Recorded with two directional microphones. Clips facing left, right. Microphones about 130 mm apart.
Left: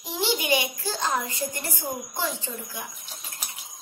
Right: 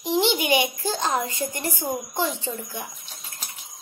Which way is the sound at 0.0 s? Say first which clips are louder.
Right 6 dB; 20° right (ahead or behind).